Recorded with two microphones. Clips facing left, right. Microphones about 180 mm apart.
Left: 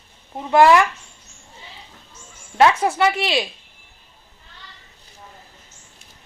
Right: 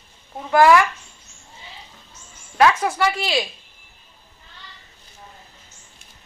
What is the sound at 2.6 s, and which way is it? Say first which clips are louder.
Speech: left 2 dB; 25° left (ahead or behind).